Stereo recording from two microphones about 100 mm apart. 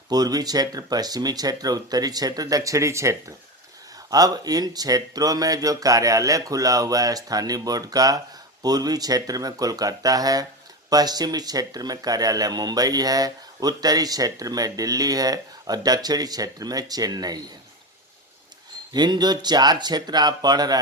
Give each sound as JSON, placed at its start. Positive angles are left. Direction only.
{"t": 0.1, "sound": "speech", "side_deg": -40}
{"t": 18.9, "sound": "speech", "side_deg": -45}